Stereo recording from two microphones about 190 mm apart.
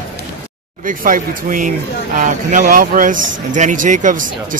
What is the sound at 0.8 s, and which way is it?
Speech, 45° right (ahead or behind).